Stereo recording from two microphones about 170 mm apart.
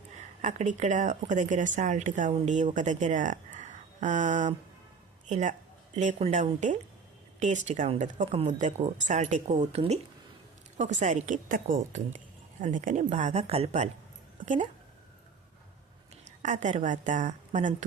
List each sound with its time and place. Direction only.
0.4 s speech: 45° right (ahead or behind)
16.4 s speech: 45° right (ahead or behind)